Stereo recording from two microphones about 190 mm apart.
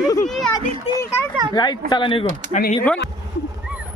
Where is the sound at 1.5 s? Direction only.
20° left (ahead or behind).